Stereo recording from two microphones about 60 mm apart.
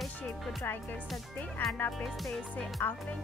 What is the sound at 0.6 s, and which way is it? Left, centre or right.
Speech, left.